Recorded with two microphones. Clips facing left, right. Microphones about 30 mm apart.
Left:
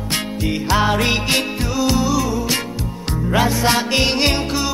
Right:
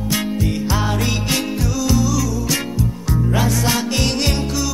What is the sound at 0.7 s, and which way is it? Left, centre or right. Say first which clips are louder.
Music: left 8 dB; left.